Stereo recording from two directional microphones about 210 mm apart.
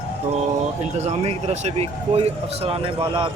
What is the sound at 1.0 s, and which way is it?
Speech, 30° right (ahead or behind).